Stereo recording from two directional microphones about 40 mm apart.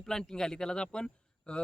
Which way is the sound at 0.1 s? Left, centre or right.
Centre.